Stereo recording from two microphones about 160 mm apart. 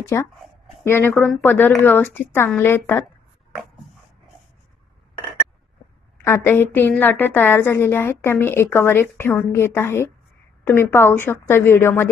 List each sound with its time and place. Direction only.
0.1 s a woman's voice: 15° left (ahead or behind)
6.2 s a woman's voice: 15° left (ahead or behind)